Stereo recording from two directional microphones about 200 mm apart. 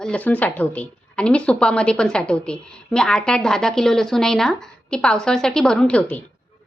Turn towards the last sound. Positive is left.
turn(degrees=5)  # may be behind; listen again after turning